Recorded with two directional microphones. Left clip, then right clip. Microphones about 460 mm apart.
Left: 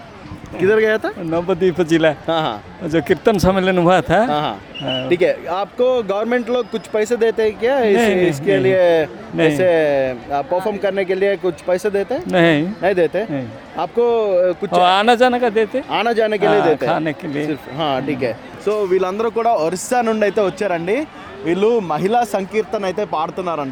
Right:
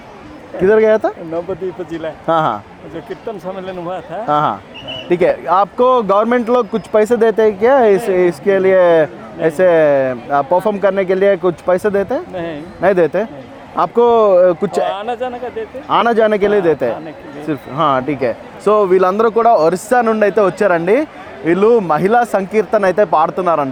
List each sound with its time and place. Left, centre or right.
0.6 s speech: centre
1.3 s speech: left
2.2 s speech: centre
2.9 s speech: left
4.3 s speech: centre
12.3 s speech: left
12.8 s speech: centre
14.8 s speech: left
15.9 s speech: centre
22.5 s speech: centre